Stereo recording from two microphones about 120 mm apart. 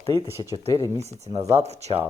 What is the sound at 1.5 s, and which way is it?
Speech, 65° right (ahead or behind).